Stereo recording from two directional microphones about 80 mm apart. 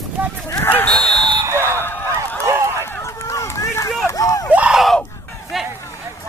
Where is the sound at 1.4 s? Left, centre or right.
Right.